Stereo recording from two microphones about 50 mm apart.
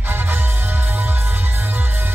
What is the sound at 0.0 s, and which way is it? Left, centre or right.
Music, right.